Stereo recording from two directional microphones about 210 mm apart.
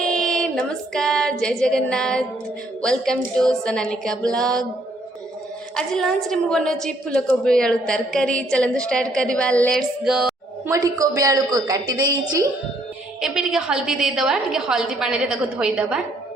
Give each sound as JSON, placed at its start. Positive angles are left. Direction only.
{"t": 0.0, "sound": "female singing", "side_deg": 5}
{"t": 2.8, "sound": "a woman's voice", "side_deg": 5}
{"t": 5.7, "sound": "a woman's voice", "side_deg": 0}
{"t": 10.7, "sound": "a woman's voice", "side_deg": -15}
{"t": 13.2, "sound": "a woman's voice", "side_deg": 0}